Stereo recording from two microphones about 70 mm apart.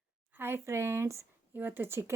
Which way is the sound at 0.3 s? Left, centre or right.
Right.